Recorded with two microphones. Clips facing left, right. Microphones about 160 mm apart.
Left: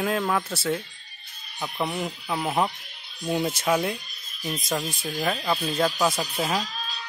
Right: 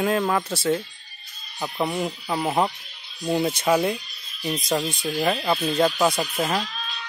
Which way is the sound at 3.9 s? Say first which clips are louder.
Right 3 dB; 50° left (ahead or behind).